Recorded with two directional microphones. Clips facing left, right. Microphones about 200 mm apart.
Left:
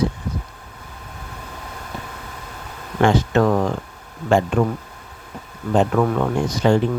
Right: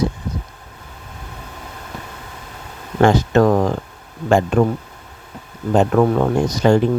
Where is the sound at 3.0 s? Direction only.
40° right (ahead or behind).